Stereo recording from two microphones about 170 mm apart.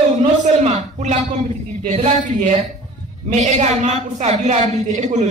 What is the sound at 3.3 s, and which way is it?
A woman's voice, 40° right (ahead or behind).